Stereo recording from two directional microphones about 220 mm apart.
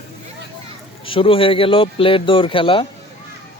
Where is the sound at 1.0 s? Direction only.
25° left (ahead or behind).